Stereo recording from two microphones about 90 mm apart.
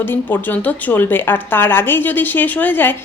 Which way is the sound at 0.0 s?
20° left (ahead or behind).